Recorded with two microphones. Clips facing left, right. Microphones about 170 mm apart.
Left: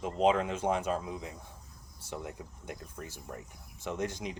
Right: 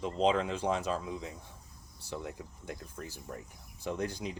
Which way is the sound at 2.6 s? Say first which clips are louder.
Right 1 dB; 35° right (ahead or behind).